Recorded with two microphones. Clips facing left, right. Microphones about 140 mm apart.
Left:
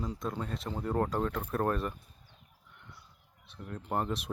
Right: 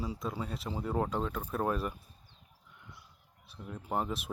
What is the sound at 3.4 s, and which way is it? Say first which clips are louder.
Speech: left 1 dB; 5° right (ahead or behind).